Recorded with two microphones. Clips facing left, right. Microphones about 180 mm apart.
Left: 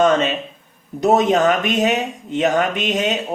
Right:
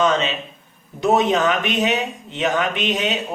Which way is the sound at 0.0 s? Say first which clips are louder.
Left 4 dB; 50° left (ahead or behind).